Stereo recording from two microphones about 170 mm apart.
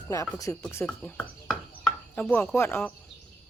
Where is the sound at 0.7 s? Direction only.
10° left (ahead or behind).